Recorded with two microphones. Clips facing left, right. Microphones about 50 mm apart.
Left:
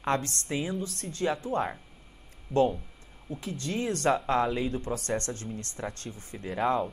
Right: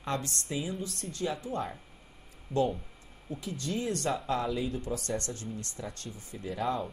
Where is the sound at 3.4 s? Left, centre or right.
Left.